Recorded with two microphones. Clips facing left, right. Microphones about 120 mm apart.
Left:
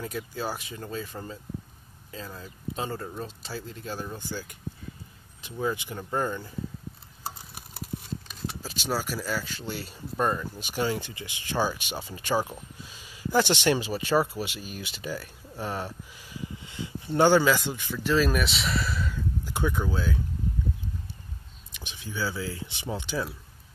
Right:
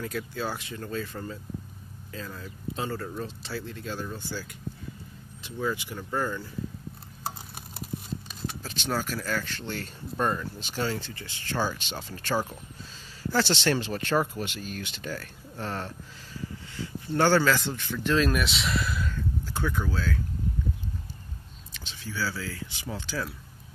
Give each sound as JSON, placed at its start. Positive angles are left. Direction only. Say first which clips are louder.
{"t": 0.0, "sound": "speech", "louder": "right 1 dB", "side_deg": 15}
{"t": 8.3, "sound": "speech", "louder": "even", "side_deg": 5}
{"t": 19.1, "sound": "a sound", "louder": "even", "side_deg": 15}
{"t": 21.7, "sound": "speech", "louder": "even", "side_deg": 15}